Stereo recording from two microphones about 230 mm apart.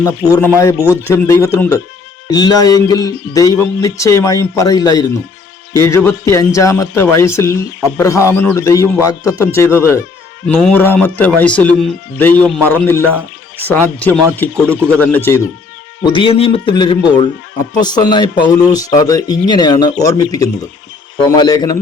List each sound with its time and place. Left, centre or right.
0.0 s speech: centre
16.0 s speech: left